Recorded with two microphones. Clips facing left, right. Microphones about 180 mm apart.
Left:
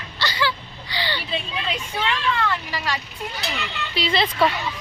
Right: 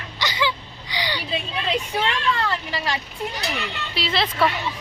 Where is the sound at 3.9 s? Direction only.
Centre (ahead or behind).